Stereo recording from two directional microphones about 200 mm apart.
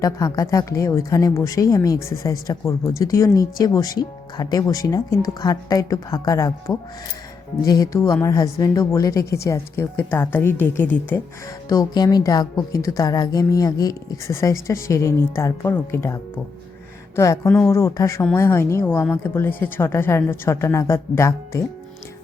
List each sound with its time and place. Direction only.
0.0 s a woman's voice: 15° left (ahead or behind)